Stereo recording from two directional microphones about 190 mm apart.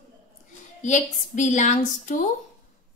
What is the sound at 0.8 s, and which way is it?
A woman's voice, 40° left (ahead or behind).